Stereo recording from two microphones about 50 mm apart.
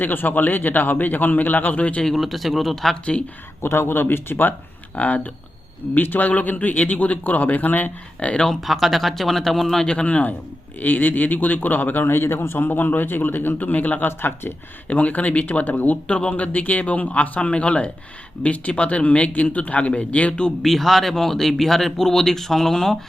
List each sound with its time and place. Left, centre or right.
0.0 s speech: left
2.1 s speech: centre
2.9 s speech: left
3.6 s speech: left
4.9 s speech: left
8.6 s speech: centre
9.8 s speech: centre; by 12.0 s left
12.0 s speech: left
14.1 s speech: left
14.8 s speech: left
20.6 s speech: centre